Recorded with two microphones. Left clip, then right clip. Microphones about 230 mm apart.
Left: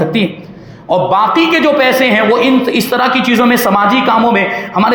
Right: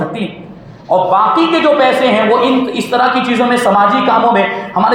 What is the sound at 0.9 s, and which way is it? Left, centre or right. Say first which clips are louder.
A man's voice: even; left.